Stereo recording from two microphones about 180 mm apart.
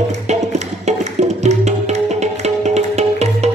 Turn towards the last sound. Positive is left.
turn(degrees=-40)  # may be behind; listen again after turning